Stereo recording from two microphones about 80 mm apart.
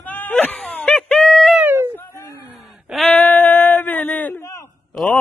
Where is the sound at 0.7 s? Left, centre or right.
Centre.